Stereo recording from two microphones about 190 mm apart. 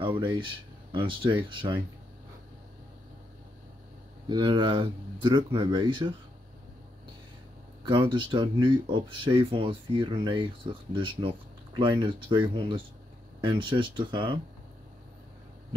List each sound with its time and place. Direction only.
0.0 s speech: 25° right (ahead or behind)
4.3 s speech: 25° right (ahead or behind)
7.8 s speech: 25° right (ahead or behind)